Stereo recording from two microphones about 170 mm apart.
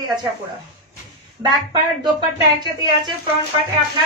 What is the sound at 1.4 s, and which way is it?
Speech, 20° right (ahead or behind).